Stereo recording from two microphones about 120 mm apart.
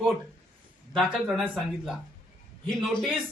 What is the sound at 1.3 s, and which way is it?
A man's voice, centre (ahead or behind).